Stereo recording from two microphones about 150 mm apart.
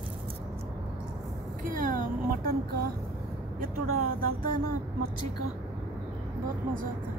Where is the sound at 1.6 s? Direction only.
65° right (ahead or behind); by 2.8 s 80° right.